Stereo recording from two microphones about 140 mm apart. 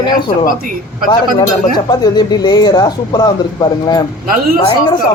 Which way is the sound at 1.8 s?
30° left (ahead or behind).